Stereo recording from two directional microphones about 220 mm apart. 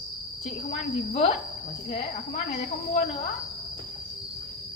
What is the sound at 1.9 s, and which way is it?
Speech, 30° left (ahead or behind).